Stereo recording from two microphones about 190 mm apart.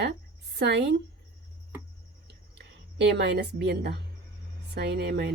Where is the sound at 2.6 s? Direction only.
65° right (ahead or behind).